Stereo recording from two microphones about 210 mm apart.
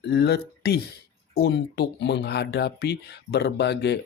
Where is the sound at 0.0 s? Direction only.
50° left (ahead or behind).